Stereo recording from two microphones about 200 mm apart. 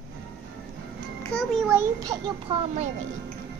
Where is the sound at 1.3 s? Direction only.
5° right (ahead or behind).